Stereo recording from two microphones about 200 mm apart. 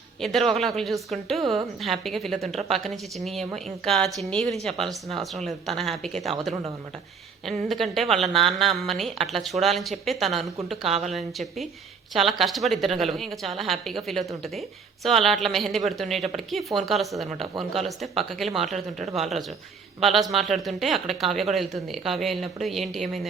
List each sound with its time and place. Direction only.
0.2 s a woman's voice: centre (ahead or behind)
7.4 s a woman's voice: centre (ahead or behind)
15.0 s a woman's voice: centre (ahead or behind)
18.7 s speech: 35° right (ahead or behind)
20.0 s a woman's voice: centre (ahead or behind)